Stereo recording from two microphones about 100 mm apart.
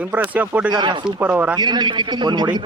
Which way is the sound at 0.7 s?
50° right (ahead or behind).